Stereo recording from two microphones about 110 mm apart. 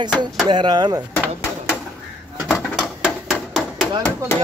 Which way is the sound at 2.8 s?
Centre (ahead or behind).